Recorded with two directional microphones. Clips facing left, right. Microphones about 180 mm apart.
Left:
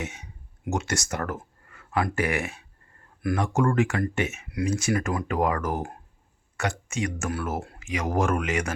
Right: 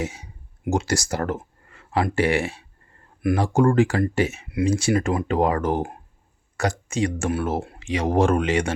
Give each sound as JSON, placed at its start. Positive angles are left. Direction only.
{"t": 0.0, "sound": "speech", "side_deg": -30}